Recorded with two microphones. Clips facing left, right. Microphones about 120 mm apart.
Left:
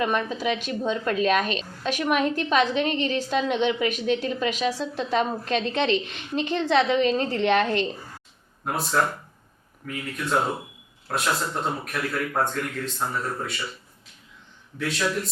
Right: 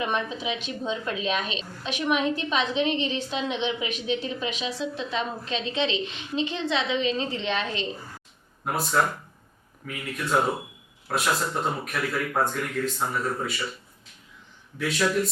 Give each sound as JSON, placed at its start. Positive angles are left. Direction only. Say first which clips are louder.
{"t": 0.0, "sound": "a woman's voice", "louder": "left 3 dB", "side_deg": 45}
{"t": 8.6, "sound": "speech", "louder": "even", "side_deg": 0}
{"t": 14.8, "sound": "speech", "louder": "right 2 dB", "side_deg": 0}